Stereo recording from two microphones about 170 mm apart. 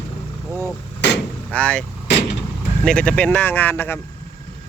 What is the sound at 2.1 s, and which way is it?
Vehicle, 90° left.